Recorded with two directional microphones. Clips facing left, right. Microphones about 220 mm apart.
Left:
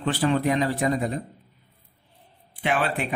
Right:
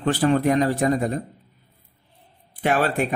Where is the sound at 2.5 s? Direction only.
40° right (ahead or behind).